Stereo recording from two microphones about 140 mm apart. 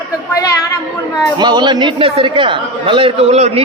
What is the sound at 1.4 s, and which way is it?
A man's voice, 30° right (ahead or behind).